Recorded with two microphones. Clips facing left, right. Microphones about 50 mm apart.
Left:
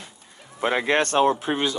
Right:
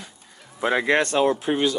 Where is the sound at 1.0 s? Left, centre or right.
Left.